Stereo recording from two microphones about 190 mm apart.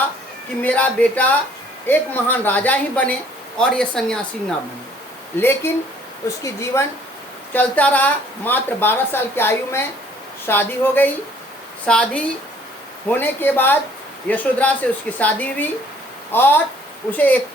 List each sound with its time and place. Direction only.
0.6 s speech: 10° left (ahead or behind)
5.4 s speech: 10° left (ahead or behind)